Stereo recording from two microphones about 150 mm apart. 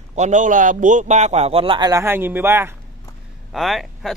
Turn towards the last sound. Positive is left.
turn(degrees=0)  # may be behind; listen again after turning